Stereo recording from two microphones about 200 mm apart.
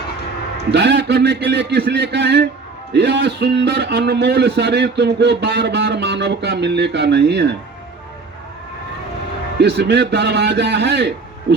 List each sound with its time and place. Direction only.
0.7 s a man's voice: 60° right (ahead or behind)
9.6 s a man's voice: 55° right (ahead or behind)